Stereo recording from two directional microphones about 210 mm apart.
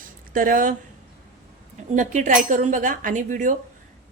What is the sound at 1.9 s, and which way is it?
Speech, 35° right (ahead or behind).